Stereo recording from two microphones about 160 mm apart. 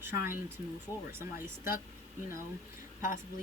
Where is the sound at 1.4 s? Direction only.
15° right (ahead or behind).